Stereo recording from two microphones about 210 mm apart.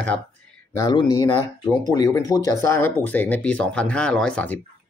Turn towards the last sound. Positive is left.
turn(degrees=5)  # may be behind; listen again after turning